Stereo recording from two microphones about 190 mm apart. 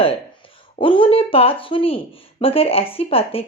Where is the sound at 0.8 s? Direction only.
25° left (ahead or behind).